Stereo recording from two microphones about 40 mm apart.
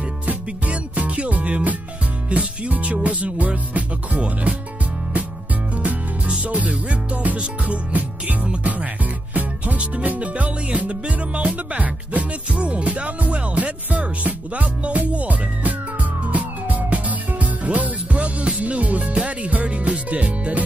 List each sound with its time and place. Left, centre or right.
0.3 s music: right
5.8 s music: right
12.2 s music: right